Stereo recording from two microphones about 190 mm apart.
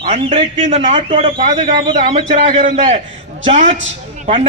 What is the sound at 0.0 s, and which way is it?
A man's voice, 35° right (ahead or behind).